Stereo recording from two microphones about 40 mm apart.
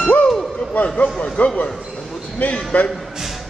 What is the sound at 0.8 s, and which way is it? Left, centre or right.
A man's voice, left.